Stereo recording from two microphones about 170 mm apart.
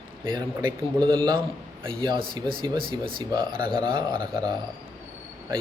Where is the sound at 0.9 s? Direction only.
25° right (ahead or behind).